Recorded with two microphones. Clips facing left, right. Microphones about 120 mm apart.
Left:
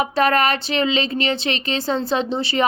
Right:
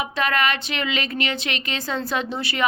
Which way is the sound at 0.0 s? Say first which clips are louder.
Left 5 dB; 40° left (ahead or behind).